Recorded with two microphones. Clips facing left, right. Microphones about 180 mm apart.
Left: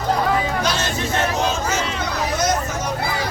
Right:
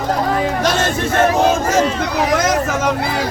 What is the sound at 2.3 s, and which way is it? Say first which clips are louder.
Vehicle: right 4 dB; 90° right.